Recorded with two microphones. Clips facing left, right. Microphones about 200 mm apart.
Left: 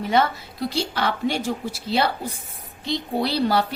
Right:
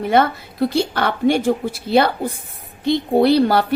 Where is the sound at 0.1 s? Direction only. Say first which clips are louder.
Right 4 dB; 55° right (ahead or behind).